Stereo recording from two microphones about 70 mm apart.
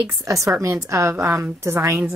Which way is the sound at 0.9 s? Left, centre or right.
Right.